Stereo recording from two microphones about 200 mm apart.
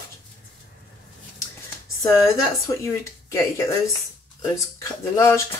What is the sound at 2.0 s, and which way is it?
Speech, 15° left (ahead or behind).